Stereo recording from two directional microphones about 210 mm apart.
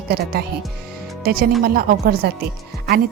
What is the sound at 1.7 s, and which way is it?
Speech, 45° right (ahead or behind).